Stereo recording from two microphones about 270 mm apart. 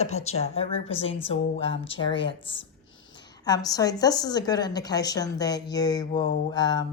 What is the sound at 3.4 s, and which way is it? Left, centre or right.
A woman's voice, centre.